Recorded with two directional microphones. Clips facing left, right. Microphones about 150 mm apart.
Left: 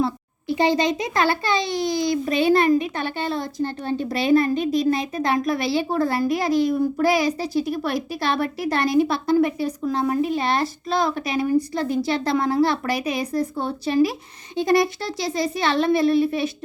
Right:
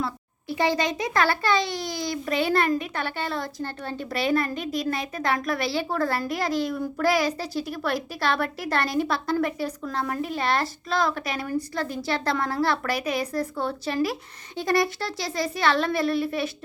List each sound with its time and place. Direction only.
0.0 s a child's voice: 20° left (ahead or behind)